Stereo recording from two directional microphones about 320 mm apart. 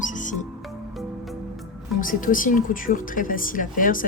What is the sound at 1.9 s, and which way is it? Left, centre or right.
Speech, left.